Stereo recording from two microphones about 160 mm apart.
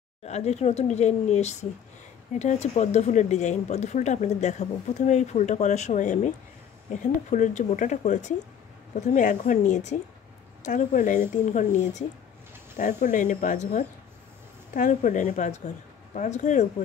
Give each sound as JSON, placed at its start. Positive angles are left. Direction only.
{"t": 0.2, "sound": "speech", "side_deg": 40}